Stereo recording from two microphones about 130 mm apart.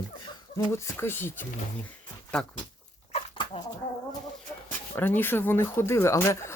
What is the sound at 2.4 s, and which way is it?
Speech, 5° left (ahead or behind).